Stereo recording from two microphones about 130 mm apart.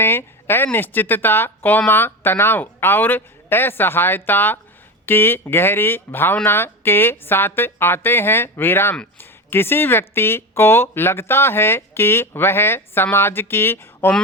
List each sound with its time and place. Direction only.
0.0 s speech: 15° left (ahead or behind)